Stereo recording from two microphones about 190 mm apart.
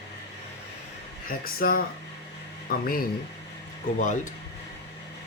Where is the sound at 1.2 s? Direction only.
50° left (ahead or behind).